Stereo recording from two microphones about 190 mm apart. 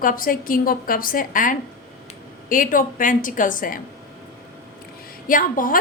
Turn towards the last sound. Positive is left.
turn(degrees=45)  # may be behind; listen again after turning